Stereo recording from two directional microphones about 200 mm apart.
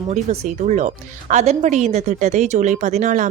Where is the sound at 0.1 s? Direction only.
35° right (ahead or behind).